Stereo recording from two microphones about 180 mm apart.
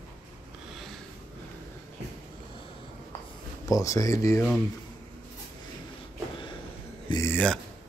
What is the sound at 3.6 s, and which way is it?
Speech, 20° left (ahead or behind).